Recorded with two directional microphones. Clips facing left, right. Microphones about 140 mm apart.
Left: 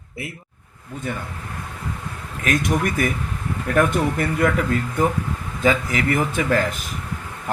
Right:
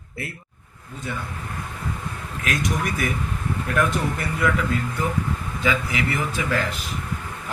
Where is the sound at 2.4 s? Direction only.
50° left (ahead or behind).